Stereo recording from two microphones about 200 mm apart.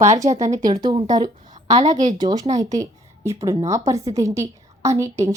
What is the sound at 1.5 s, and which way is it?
Speech, 35° right (ahead or behind).